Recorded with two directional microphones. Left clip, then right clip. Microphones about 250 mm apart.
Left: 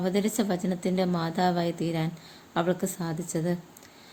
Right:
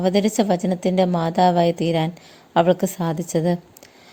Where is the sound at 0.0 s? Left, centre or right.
Right.